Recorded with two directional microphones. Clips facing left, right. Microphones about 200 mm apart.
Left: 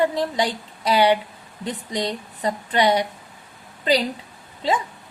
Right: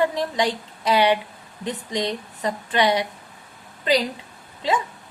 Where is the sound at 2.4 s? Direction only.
35° left (ahead or behind).